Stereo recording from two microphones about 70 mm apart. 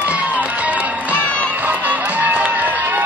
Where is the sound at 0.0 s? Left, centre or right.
Right.